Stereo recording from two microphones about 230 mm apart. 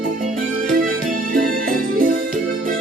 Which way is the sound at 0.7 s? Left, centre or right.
Right.